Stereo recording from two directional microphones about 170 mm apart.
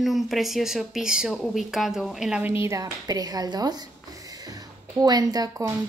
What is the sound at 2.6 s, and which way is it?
Speech, 20° right (ahead or behind).